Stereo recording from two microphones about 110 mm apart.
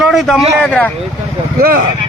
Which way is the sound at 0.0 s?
Centre (ahead or behind).